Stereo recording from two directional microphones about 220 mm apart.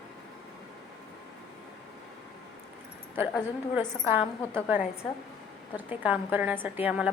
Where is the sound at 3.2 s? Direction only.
10° right (ahead or behind).